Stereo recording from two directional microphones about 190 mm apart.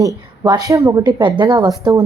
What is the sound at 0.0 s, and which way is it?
A woman's voice, 20° right (ahead or behind).